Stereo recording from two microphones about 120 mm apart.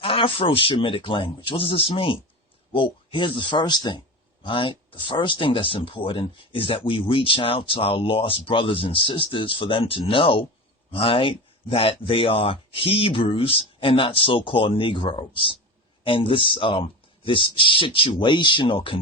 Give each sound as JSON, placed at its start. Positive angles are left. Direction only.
{"t": 0.0, "sound": "speech", "side_deg": 50}